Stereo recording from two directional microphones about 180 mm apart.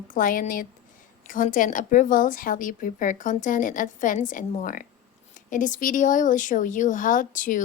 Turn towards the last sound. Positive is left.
turn(degrees=45)  # may be behind; listen again after turning